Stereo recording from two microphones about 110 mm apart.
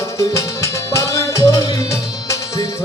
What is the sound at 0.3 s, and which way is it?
Music, 25° left (ahead or behind).